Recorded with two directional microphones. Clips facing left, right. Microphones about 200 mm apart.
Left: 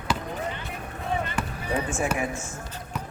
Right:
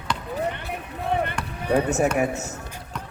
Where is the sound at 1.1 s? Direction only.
60° right (ahead or behind).